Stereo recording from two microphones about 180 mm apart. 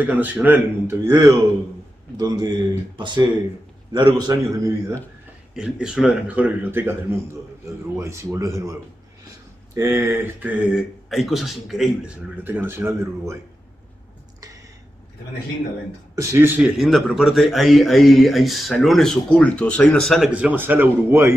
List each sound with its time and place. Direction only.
0.0 s speech: 10° right (ahead or behind)
5.5 s speech: 5° right (ahead or behind)
9.8 s speech: 15° right (ahead or behind)
16.2 s a man's voice: 15° right (ahead or behind)